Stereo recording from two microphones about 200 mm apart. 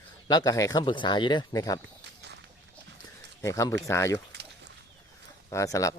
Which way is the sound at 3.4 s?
15° left (ahead or behind).